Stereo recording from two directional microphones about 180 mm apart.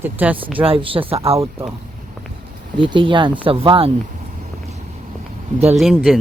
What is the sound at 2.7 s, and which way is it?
Speech, 25° right (ahead or behind).